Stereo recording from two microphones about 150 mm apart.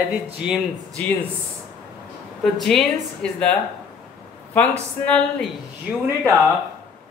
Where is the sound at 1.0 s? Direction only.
10° left (ahead or behind).